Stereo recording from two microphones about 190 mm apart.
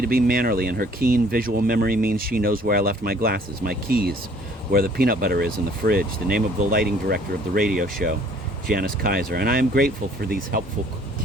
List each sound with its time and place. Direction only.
0.0 s speech: 50° right (ahead or behind)